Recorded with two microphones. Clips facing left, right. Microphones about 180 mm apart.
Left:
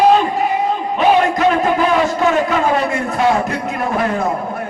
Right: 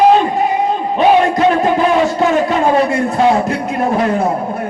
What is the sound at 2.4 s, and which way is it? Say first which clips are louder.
A man's voice: right 3 dB; 35° right (ahead or behind).